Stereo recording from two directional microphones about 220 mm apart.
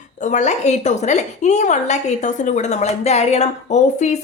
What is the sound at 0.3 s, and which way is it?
A woman's voice, 30° left (ahead or behind).